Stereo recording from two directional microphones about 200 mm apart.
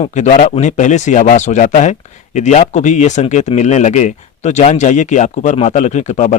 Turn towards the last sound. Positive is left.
turn(degrees=35)  # may be behind; listen again after turning